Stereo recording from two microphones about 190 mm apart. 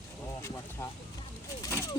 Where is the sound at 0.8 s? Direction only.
15° left (ahead or behind).